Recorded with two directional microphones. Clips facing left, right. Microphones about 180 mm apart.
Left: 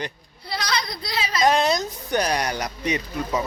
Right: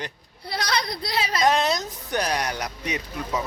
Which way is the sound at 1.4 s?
Centre (ahead or behind).